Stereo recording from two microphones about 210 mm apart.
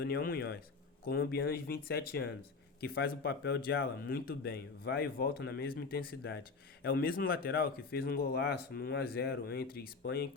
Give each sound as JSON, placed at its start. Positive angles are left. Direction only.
{"t": 0.0, "sound": "a man's voice", "side_deg": 45}